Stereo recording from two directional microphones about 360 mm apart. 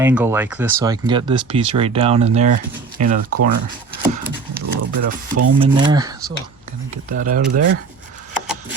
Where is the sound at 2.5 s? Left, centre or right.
Right.